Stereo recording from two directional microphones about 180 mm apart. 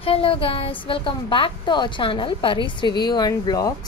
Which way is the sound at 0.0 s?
30° left (ahead or behind).